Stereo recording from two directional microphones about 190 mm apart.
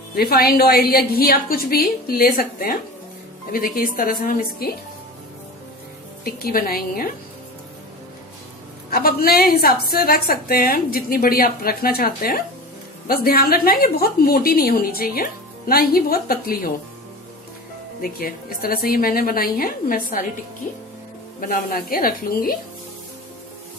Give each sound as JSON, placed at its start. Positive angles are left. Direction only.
{"t": 0.1, "sound": "a woman's voice", "side_deg": 55}
{"t": 6.2, "sound": "a woman's voice", "side_deg": 50}
{"t": 8.9, "sound": "a woman's voice", "side_deg": 50}
{"t": 18.2, "sound": "a woman's voice", "side_deg": 50}
{"t": 21.4, "sound": "a woman's voice", "side_deg": 50}